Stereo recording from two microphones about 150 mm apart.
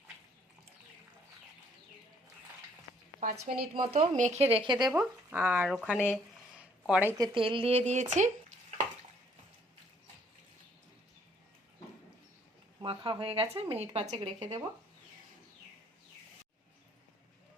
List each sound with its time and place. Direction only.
3.2 s a woman's voice: 70° right (ahead or behind)
3.8 s speech: 35° right (ahead or behind)
4.2 s speech: 50° right (ahead or behind); by 4.9 s 30° right (ahead or behind)
4.9 s speech: 10° right (ahead or behind)
6.6 s a sound: 5° right (ahead or behind)
7.2 s speech: 35° right (ahead or behind); by 8.5 s 55° right (ahead or behind)
12.8 s speech: 35° right (ahead or behind)